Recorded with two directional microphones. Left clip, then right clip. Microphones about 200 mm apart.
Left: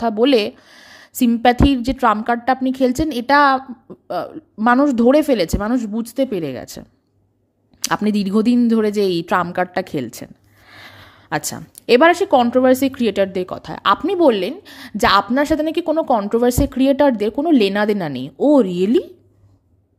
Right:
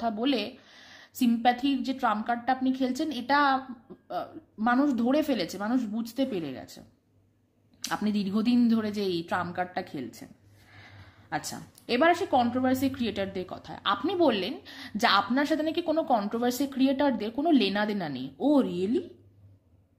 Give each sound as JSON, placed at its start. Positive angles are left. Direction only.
{"t": 0.0, "sound": "a woman's voice", "side_deg": 45}